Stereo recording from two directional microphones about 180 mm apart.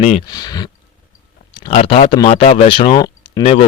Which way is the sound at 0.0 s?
35° left (ahead or behind).